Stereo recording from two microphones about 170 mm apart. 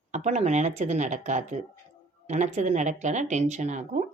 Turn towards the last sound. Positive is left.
turn(degrees=-45)  # may be behind; listen again after turning